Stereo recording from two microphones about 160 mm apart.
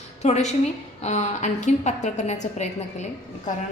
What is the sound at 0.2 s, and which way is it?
A woman's voice, 45° left (ahead or behind).